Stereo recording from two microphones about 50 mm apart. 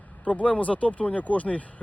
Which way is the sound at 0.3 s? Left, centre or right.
Left.